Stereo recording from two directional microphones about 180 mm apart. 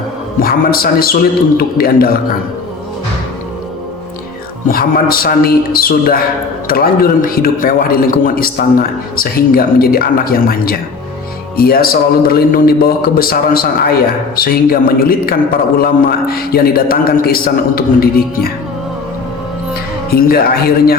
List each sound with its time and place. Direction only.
0.3 s a man's voice: 55° left (ahead or behind)
4.7 s a man's voice: 55° left (ahead or behind)
20.1 s a man's voice: 55° left (ahead or behind)